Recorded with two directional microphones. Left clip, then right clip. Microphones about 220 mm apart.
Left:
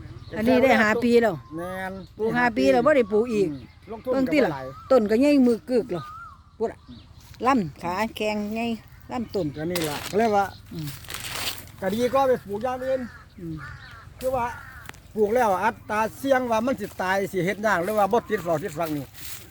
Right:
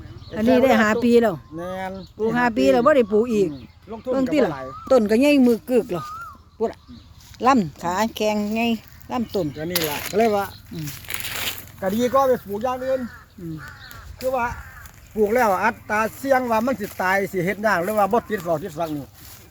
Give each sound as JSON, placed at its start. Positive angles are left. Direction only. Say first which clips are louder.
{"t": 0.3, "sound": "speech", "louder": "right 2 dB", "side_deg": 0}
{"t": 3.8, "sound": "speech", "louder": "right 2 dB", "side_deg": 5}
{"t": 7.3, "sound": "speech", "louder": "right 4 dB", "side_deg": -15}
{"t": 9.6, "sound": "speech", "louder": "right 3 dB", "side_deg": 15}
{"t": 10.8, "sound": "crumpling", "louder": "right 7 dB", "side_deg": 20}
{"t": 12.1, "sound": "speech", "louder": "right 4 dB", "side_deg": 15}
{"t": 14.3, "sound": "speech", "louder": "right 3 dB", "side_deg": 5}